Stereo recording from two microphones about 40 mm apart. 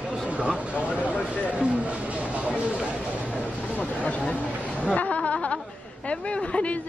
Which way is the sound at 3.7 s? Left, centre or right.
Left.